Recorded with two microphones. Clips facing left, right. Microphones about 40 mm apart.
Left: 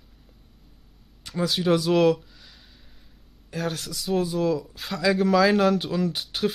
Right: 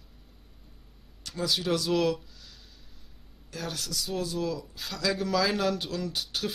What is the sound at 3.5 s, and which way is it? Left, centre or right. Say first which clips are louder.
Speech: left 5 dB; centre.